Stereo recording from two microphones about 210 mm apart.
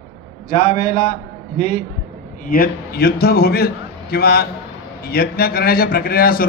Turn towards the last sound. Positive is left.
turn(degrees=45)  # may be behind; listen again after turning